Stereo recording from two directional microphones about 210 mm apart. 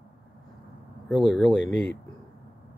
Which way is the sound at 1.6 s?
55° left (ahead or behind).